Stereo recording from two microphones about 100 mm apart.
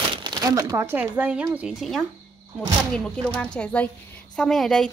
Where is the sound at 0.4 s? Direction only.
35° right (ahead or behind); by 1.8 s 10° right (ahead or behind).